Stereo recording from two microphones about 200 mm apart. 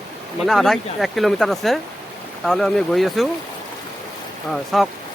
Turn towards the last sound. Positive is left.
turn(degrees=0)  # may be behind; listen again after turning